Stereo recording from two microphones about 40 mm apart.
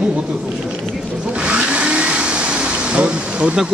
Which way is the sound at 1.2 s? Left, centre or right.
Right.